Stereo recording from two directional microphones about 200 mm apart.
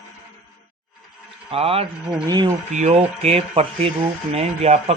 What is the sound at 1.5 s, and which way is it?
Speech, 30° right (ahead or behind).